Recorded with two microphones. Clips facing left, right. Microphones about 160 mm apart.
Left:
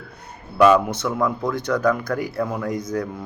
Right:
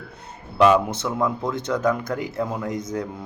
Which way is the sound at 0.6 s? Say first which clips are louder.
Left 2 dB; 25° right (ahead or behind).